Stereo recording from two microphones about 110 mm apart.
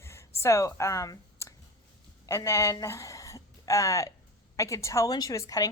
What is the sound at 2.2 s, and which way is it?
A woman's voice, 30° left (ahead or behind).